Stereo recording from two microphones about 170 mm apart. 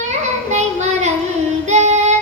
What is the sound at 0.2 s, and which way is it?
Child singing, 45° right (ahead or behind).